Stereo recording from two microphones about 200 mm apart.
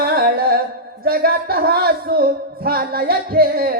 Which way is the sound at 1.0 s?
50° right (ahead or behind).